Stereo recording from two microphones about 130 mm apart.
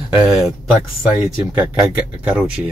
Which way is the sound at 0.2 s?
5° right (ahead or behind).